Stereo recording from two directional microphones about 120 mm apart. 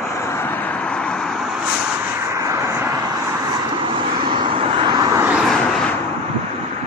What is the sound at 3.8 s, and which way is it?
Vehicle, 45° right (ahead or behind).